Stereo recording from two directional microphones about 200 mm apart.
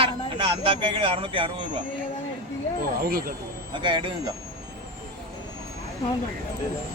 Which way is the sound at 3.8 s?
25° right (ahead or behind).